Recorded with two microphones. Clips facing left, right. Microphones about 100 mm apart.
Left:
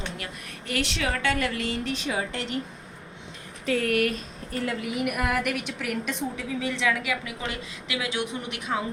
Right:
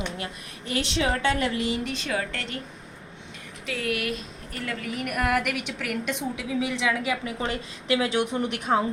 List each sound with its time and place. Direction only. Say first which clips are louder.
0.7 s a woman's voice: right 2 dB; 20° right (ahead or behind)
1.8 s a woman's voice: even; 5° left (ahead or behind); by 2.6 s 20° left (ahead or behind)
3.7 s speech: left 5 dB; 45° left (ahead or behind)
4.5 s a woman's voice: left 4 dB; 25° left (ahead or behind)
4.9 s a woman's voice: right 2 dB; 5° left (ahead or behind); by 6.9 s 15° right (ahead or behind)
7.0 s a woman's voice: right 3 dB; 30° right (ahead or behind)